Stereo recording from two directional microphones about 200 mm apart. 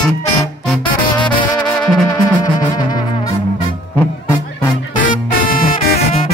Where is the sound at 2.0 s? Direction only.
20° left (ahead or behind).